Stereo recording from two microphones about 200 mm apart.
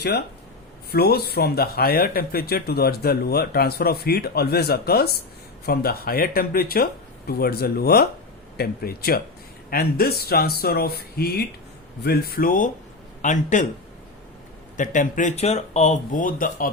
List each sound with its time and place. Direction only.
0.9 s speech: 50° left (ahead or behind)
14.8 s speech: 40° left (ahead or behind)